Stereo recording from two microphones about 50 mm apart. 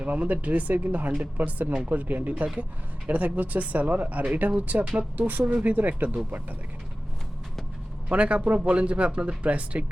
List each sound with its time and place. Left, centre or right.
0.0 s speech: right
8.1 s speech: right